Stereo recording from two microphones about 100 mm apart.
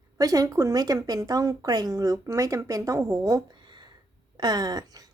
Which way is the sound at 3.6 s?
50° right (ahead or behind).